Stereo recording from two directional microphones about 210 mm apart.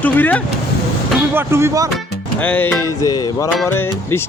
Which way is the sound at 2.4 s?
10° left (ahead or behind).